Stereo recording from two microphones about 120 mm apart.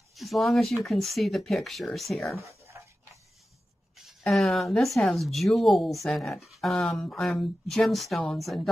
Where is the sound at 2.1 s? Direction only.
25° left (ahead or behind).